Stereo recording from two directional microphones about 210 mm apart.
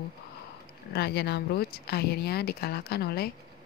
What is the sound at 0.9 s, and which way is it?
Speech, 50° left (ahead or behind).